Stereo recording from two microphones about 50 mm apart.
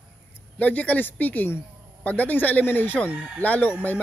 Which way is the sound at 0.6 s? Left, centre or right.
Left.